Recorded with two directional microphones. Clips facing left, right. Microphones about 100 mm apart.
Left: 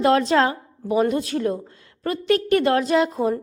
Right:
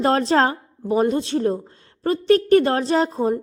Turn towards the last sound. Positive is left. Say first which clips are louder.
# even
turn(degrees=-30)  # may be behind; listen again after turning